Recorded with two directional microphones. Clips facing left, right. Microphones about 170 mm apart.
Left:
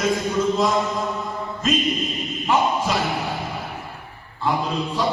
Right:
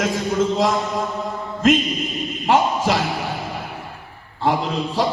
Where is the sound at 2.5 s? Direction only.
90° right.